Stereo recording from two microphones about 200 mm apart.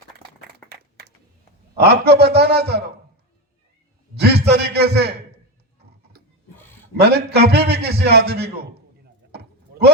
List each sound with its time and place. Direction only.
1.8 s a man's voice: 55° right (ahead or behind)
4.1 s a sound: 55° right (ahead or behind)
6.9 s a man's voice: 55° right (ahead or behind)
9.3 s sheep: 55° right (ahead or behind)